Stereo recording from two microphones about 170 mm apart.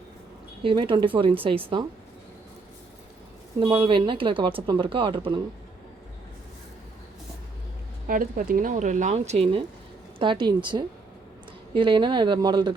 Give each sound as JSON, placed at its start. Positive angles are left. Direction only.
{"t": 0.6, "sound": "speech", "side_deg": -30}
{"t": 3.6, "sound": "speech", "side_deg": -30}
{"t": 8.0, "sound": "speech", "side_deg": -55}